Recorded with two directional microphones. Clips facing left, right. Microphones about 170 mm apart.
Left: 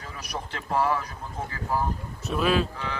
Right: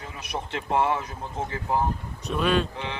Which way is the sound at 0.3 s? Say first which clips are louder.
Right 3 dB; 25° right (ahead or behind).